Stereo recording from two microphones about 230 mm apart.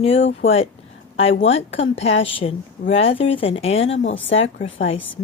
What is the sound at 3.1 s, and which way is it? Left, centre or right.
Speech, left.